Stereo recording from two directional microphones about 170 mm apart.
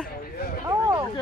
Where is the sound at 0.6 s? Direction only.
15° right (ahead or behind).